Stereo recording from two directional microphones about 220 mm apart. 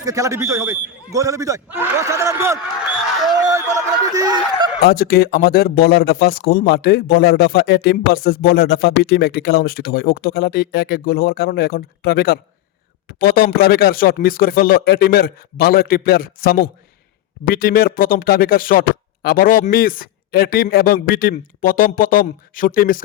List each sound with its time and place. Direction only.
0.0 s a man's voice: 15° right (ahead or behind)
3.4 s a sound: 15° right (ahead or behind)
4.8 s speech: 45° left (ahead or behind)